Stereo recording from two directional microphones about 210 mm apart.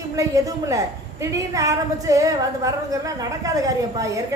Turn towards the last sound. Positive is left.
turn(degrees=-15)  # may be behind; listen again after turning